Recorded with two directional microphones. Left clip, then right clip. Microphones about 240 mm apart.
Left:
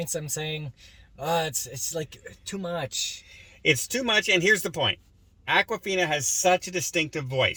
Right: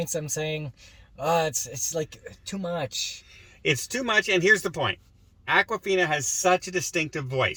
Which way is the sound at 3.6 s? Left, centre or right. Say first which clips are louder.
Left 2 dB; centre.